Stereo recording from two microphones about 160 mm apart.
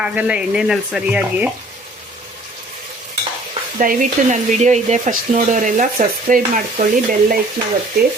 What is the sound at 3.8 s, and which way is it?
Speech, 50° right (ahead or behind).